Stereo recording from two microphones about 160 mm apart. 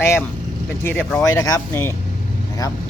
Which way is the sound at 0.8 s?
5° left (ahead or behind).